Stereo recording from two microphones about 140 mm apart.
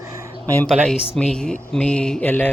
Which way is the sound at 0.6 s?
Centre (ahead or behind).